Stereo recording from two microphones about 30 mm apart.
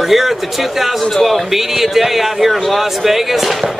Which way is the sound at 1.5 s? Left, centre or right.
Centre.